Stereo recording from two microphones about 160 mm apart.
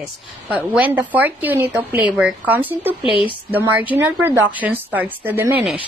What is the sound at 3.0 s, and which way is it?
Speech, 35° left (ahead or behind).